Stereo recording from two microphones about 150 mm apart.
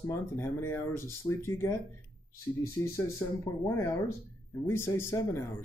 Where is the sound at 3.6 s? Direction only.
20° left (ahead or behind).